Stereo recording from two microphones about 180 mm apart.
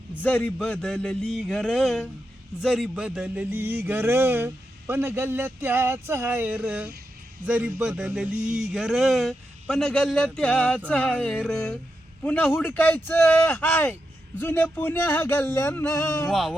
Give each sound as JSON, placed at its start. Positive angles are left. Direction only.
{"t": 0.2, "sound": "speech", "side_deg": 10}
{"t": 12.2, "sound": "a sound", "side_deg": 10}
{"t": 16.2, "sound": "speech", "side_deg": 0}